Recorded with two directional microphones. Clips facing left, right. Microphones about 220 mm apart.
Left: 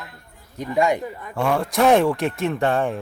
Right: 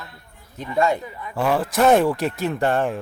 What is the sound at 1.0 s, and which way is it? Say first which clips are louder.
Speech: left 3 dB; 45° left (ahead or behind).